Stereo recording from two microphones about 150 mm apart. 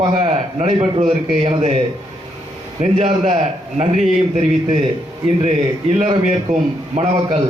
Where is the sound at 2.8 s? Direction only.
45° right (ahead or behind).